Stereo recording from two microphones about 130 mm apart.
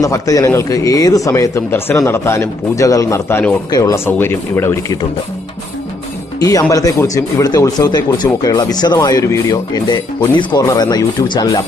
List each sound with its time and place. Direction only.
0.0 s speech: 25° left (ahead or behind)
6.4 s speech: 25° left (ahead or behind)